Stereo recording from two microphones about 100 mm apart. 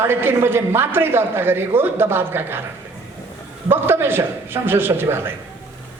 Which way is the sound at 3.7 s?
20° right (ahead or behind).